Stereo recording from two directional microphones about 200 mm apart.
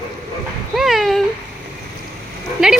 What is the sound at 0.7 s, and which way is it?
Speech, centre (ahead or behind).